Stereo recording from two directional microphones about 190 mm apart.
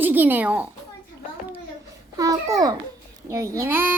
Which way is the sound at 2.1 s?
20° right (ahead or behind).